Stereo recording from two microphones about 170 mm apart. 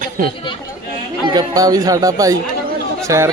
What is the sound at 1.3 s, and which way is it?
Speech, 20° right (ahead or behind).